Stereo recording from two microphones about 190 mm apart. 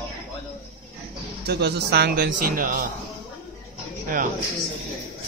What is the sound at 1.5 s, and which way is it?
Speech, 60° right (ahead or behind).